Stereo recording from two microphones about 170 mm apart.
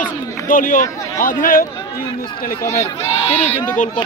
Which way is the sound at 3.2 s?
10° left (ahead or behind).